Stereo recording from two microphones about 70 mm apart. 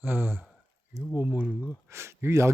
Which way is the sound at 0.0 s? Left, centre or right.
Right.